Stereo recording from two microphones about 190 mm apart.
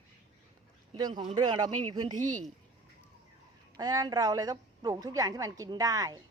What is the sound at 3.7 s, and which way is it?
A woman's voice, 20° right (ahead or behind).